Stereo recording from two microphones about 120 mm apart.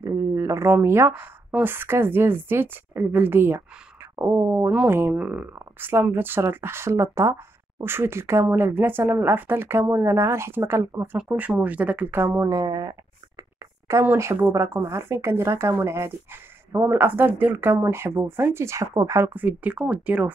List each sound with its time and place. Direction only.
0.0 s speech: 25° right (ahead or behind)
12.4 s speech: 35° right (ahead or behind)
13.8 s speech: 25° right (ahead or behind)